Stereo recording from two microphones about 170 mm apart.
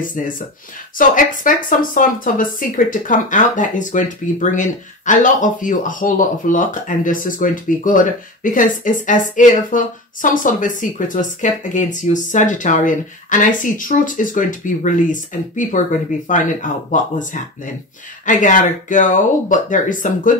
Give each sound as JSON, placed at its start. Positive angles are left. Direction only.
{"t": 0.9, "sound": "speech", "side_deg": 50}